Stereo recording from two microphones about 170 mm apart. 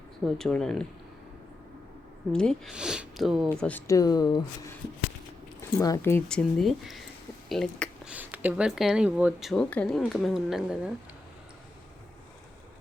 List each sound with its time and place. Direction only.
0.3 s speech: 5° left (ahead or behind)
2.3 s speech: 5° left (ahead or behind)
3.8 s speech: 20° left (ahead or behind)
5.8 s speech: 15° left (ahead or behind); by 8.1 s centre (ahead or behind)
8.1 s speech: 10° right (ahead or behind)